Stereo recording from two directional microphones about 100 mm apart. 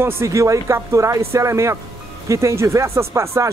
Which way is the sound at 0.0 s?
30° right (ahead or behind).